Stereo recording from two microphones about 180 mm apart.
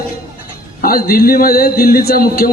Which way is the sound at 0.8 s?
55° left (ahead or behind).